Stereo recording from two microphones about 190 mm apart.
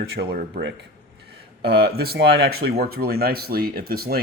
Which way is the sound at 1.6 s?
55° right (ahead or behind).